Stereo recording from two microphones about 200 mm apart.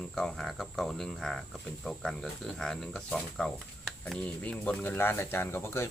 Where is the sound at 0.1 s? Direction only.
5° left (ahead or behind).